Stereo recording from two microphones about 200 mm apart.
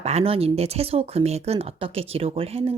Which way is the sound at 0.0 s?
30° right (ahead or behind).